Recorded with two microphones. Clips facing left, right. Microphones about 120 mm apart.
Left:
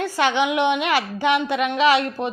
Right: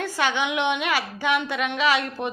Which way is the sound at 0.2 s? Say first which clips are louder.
Left 5 dB; 50° left (ahead or behind).